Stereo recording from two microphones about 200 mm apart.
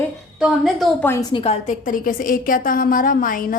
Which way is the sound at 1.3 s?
30° left (ahead or behind).